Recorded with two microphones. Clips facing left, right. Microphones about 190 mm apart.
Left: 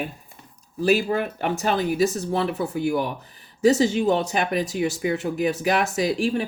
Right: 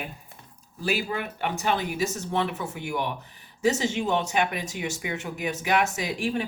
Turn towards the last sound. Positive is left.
turn(degrees=30)  # may be behind; listen again after turning